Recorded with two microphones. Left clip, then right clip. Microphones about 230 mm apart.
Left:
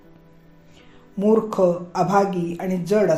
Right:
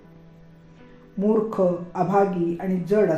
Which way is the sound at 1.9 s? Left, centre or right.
Left.